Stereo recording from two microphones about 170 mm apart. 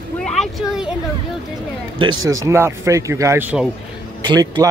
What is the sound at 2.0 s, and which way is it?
Speech, 25° right (ahead or behind).